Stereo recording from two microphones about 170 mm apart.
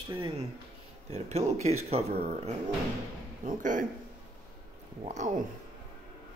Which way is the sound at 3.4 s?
50° right (ahead or behind).